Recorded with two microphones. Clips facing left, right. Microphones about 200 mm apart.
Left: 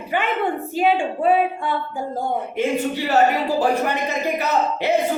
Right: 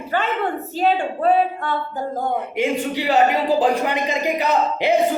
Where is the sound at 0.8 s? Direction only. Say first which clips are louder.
Even; 10° left (ahead or behind).